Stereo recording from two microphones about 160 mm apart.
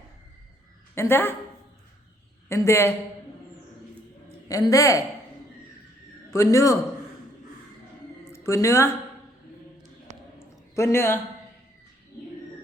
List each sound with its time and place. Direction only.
0.9 s a man's voice: 15° left (ahead or behind)
2.5 s a man's voice: 15° left (ahead or behind)
4.4 s a woman's voice: 20° left (ahead or behind)
6.3 s a woman's voice: 20° left (ahead or behind)
8.2 s a woman's voice: 15° left (ahead or behind)
10.1 s a sound: 45° right (ahead or behind)
10.8 s a man's voice: 15° left (ahead or behind)